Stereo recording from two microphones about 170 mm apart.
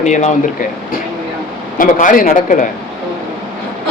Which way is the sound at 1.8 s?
55° left (ahead or behind).